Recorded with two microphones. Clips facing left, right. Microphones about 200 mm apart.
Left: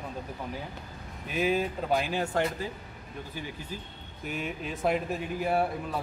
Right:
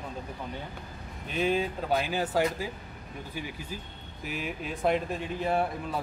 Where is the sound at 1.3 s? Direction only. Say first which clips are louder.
Even; 5° left (ahead or behind).